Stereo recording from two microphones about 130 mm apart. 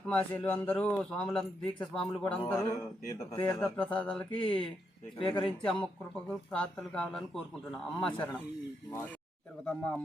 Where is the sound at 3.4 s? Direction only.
10° left (ahead or behind).